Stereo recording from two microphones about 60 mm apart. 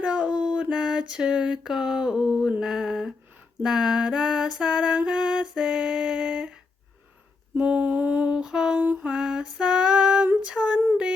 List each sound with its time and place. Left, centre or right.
0.0 s music: centre
2.6 s mantra: centre
3.6 s music: centre
7.5 s lullaby: right
8.4 s a sound: centre
9.0 s female singing: centre